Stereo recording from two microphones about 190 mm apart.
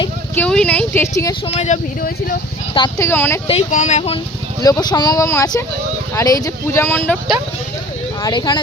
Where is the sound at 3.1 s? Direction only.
10° left (ahead or behind).